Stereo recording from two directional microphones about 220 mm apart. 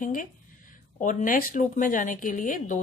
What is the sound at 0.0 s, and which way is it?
Speech, 35° left (ahead or behind).